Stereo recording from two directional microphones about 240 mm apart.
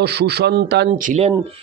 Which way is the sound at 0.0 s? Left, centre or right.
Right.